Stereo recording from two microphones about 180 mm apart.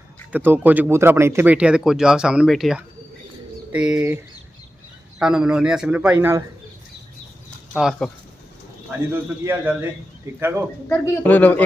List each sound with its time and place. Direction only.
0.3 s speech: 10° right (ahead or behind)
5.2 s a man's voice: 5° right (ahead or behind)
7.7 s a man's voice: 5° right (ahead or behind)
10.9 s speech: 10° left (ahead or behind)